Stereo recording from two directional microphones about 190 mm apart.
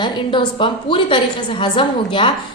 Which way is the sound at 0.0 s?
25° left (ahead or behind).